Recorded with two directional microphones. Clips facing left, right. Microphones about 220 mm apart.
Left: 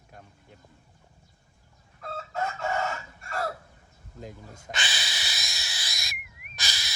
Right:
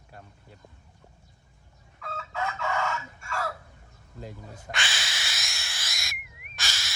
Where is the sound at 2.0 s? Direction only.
45° left (ahead or behind).